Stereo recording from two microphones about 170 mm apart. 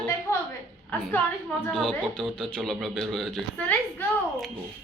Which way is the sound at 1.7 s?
5° left (ahead or behind).